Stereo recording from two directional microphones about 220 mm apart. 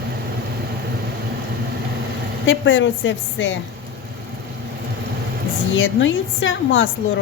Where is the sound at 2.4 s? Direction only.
60° left (ahead or behind).